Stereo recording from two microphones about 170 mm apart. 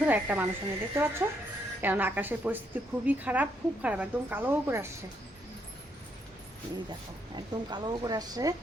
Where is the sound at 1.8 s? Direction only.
10° right (ahead or behind).